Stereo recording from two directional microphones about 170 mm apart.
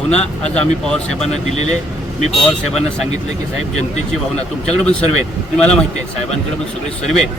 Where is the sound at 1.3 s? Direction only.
40° left (ahead or behind).